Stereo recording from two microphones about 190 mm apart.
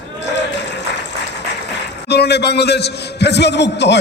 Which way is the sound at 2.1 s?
60° left (ahead or behind).